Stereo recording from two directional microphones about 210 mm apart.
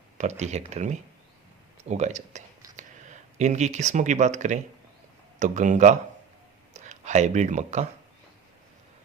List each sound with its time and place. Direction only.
0.2 s speech: 35° right (ahead or behind)